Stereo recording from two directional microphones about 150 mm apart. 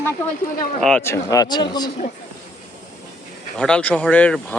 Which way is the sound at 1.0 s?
15° left (ahead or behind).